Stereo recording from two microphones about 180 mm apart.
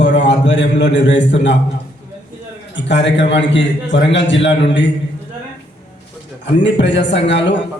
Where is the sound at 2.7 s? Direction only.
75° left (ahead or behind).